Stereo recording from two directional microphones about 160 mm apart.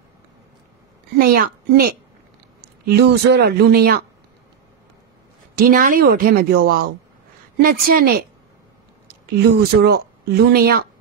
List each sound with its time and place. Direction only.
1.1 s a woman's voice: 65° right (ahead or behind)
2.6 s speech: 85° right
5.6 s a woman's voice: 60° right (ahead or behind)
9.0 s speech: 80° right